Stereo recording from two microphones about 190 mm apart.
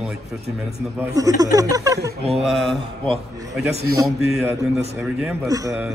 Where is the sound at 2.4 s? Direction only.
Centre (ahead or behind).